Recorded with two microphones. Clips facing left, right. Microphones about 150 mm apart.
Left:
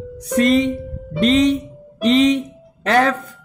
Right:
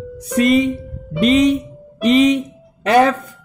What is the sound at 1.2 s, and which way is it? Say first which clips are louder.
Speech: right 1 dB; 10° right (ahead or behind).